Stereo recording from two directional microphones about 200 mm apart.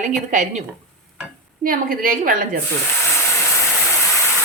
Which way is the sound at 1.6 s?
45° right (ahead or behind).